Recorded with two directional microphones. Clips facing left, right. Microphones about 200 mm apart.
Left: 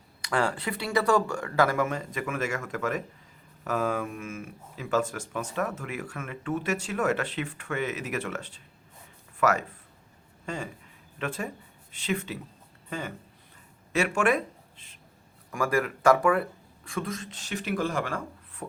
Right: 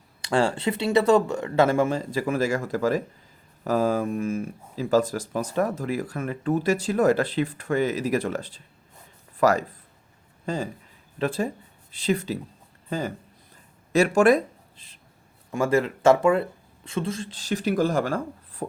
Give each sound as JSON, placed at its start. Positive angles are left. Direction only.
{"t": 0.2, "sound": "speech", "side_deg": -30}
{"t": 15.5, "sound": "speech", "side_deg": -25}